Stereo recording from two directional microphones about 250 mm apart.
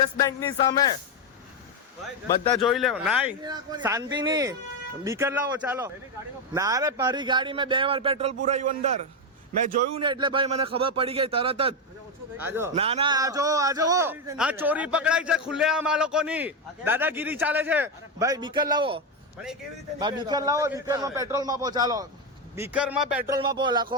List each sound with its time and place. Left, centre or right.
0.2 s speech: centre
2.5 s speech: centre
3.4 s a man's voice: centre
10.0 s speech: centre
12.4 s a man's voice: centre
12.7 s a man's voice: right